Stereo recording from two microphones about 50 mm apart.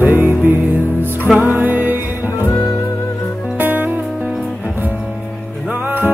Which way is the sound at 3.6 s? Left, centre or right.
Right.